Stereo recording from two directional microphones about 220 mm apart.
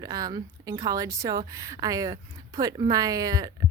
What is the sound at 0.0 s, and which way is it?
Speech, 15° right (ahead or behind).